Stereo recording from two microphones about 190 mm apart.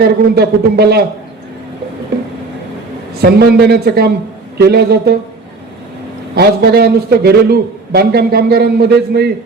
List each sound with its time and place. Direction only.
0.0 s a man's voice: 60° right (ahead or behind)
3.2 s a man's voice: 55° right (ahead or behind)
6.3 s a man's voice: 55° right (ahead or behind)